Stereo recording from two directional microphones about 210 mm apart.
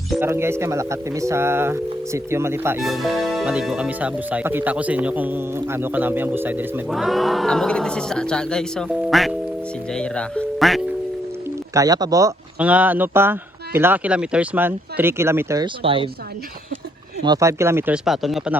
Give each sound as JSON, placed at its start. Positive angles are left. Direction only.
{"t": 0.2, "sound": "speech", "side_deg": -10}
{"t": 2.8, "sound": "speech", "side_deg": 0}
{"t": 11.7, "sound": "speech", "side_deg": -15}
{"t": 12.5, "sound": "speech", "side_deg": -5}
{"t": 17.2, "sound": "speech", "side_deg": -15}